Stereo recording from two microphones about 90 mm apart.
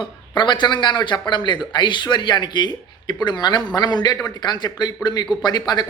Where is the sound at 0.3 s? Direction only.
60° left (ahead or behind).